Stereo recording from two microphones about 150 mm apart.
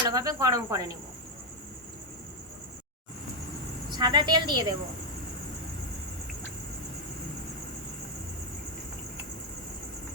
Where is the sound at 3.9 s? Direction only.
30° right (ahead or behind).